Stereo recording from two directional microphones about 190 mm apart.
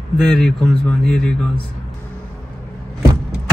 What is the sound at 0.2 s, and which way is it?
A man's voice, 5° left (ahead or behind).